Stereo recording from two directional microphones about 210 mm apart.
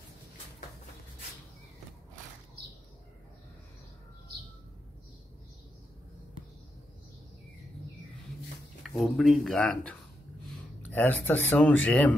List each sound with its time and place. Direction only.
8.8 s speech: centre (ahead or behind)